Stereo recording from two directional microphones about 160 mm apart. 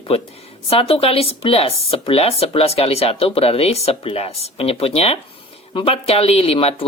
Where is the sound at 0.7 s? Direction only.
35° left (ahead or behind).